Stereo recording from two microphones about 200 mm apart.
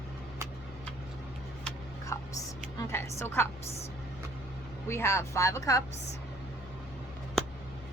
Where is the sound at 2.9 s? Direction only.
15° left (ahead or behind).